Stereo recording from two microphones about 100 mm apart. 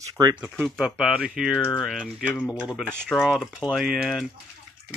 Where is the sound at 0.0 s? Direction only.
35° right (ahead or behind).